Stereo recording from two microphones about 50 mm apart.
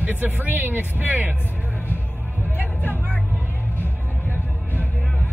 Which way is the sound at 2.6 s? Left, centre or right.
Left.